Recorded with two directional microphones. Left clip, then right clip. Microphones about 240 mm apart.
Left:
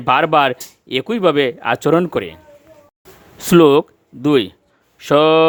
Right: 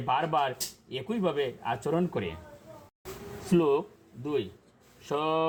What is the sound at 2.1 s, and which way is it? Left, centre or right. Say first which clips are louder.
Speech: left 12 dB; left.